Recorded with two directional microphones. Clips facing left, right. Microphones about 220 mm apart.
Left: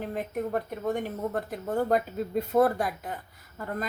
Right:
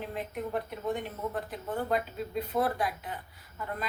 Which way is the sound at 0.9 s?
45° left (ahead or behind).